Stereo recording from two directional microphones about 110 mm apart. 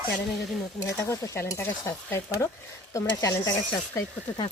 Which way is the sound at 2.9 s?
30° left (ahead or behind).